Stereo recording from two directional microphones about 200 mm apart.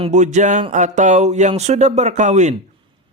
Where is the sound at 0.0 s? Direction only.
35° right (ahead or behind).